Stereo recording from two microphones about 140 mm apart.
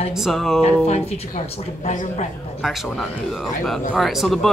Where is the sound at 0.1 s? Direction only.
Centre (ahead or behind).